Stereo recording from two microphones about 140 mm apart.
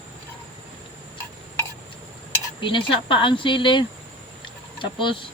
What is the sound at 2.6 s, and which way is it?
Speech, 35° left (ahead or behind).